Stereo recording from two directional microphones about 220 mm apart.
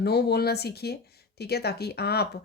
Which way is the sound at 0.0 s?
50° left (ahead or behind).